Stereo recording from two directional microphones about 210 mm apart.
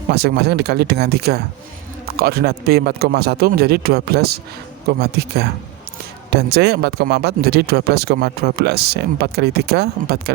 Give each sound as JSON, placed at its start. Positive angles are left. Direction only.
{"t": 0.1, "sound": "speech", "side_deg": -50}